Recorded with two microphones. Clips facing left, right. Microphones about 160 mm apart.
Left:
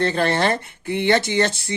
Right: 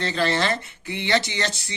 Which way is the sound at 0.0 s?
55° left (ahead or behind).